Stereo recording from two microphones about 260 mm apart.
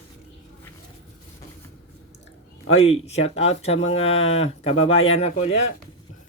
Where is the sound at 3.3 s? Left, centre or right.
Left.